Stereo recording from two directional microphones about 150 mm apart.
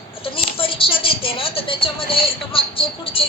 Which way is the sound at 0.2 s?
35° left (ahead or behind).